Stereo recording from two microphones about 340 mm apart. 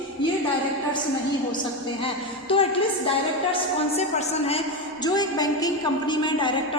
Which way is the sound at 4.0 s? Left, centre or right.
Centre.